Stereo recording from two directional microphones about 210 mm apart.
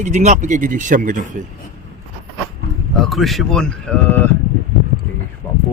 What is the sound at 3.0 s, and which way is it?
Speech, centre (ahead or behind).